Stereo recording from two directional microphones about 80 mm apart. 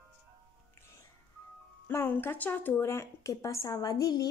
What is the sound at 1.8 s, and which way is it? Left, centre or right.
Speech, left.